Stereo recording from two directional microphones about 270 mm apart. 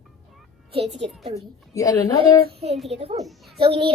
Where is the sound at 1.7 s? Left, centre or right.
Centre.